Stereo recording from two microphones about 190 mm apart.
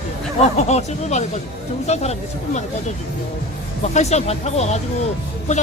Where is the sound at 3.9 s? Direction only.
35° left (ahead or behind).